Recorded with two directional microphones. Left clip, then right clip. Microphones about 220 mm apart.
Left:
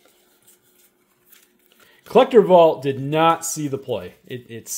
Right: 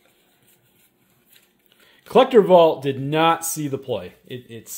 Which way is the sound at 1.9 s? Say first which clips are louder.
Even; 10° left (ahead or behind).